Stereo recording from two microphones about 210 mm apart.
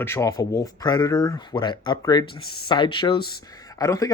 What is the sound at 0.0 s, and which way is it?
Speech, 15° left (ahead or behind).